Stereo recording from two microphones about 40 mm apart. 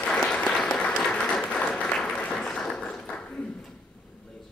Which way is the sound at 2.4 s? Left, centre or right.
Centre.